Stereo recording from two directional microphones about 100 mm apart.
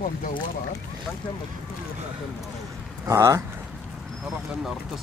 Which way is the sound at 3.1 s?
30° right (ahead or behind).